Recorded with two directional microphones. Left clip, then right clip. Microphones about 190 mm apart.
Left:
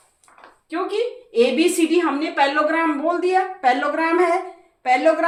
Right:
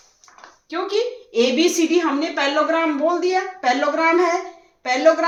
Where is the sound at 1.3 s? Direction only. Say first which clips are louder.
Even; 20° right (ahead or behind).